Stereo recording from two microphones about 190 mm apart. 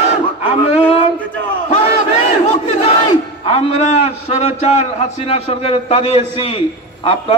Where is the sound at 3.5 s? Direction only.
30° left (ahead or behind).